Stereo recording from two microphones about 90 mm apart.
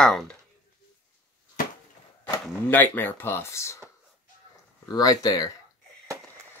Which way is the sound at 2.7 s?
20° left (ahead or behind).